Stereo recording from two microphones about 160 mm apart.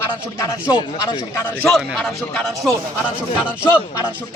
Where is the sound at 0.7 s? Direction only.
25° left (ahead or behind).